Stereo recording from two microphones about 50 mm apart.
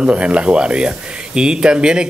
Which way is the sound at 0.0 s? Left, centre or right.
Right.